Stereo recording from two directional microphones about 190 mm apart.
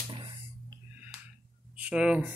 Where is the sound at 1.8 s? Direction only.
5° right (ahead or behind).